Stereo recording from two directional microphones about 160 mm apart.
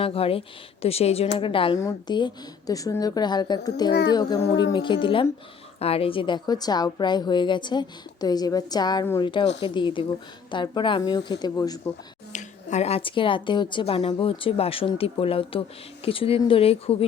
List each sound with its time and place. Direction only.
0.0 s a woman's voice: 35° left (ahead or behind)
12.3 s a woman's voice: 45° left (ahead or behind)